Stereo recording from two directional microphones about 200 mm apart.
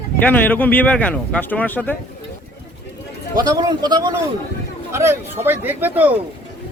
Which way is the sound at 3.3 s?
20° right (ahead or behind).